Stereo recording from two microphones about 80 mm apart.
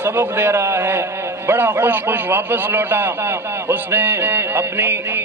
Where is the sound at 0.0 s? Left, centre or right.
Right.